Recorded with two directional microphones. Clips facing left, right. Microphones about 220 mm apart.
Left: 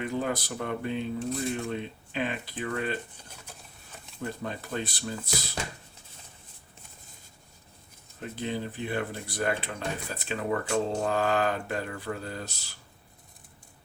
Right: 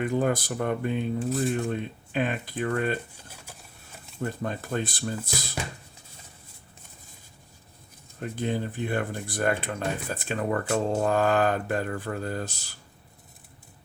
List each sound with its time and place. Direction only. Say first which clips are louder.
0.0 s speech: right 5 dB; 50° right (ahead or behind)
1.3 s speech: right 5 dB; centre (ahead or behind)
1.5 s speech: right 4 dB; 50° right (ahead or behind)
4.2 s speech: right 4 dB; 50° right (ahead or behind)
8.2 s speech: right 4 dB; 50° right (ahead or behind)